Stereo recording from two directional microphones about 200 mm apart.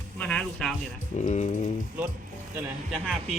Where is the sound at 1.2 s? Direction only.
35° left (ahead or behind).